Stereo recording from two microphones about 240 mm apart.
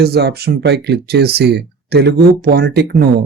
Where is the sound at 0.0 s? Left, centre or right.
Right.